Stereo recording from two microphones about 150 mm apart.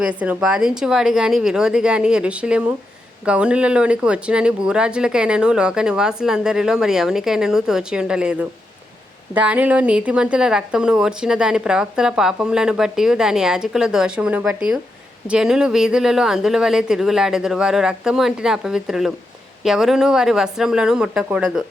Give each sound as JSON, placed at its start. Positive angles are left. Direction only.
{"t": 0.0, "sound": "speech", "side_deg": -10}